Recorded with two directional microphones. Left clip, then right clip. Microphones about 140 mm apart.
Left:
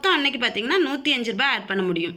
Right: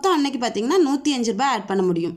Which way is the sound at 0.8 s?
40° right (ahead or behind).